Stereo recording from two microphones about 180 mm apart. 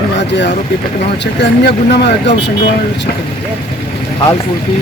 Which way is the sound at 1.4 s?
70° left (ahead or behind).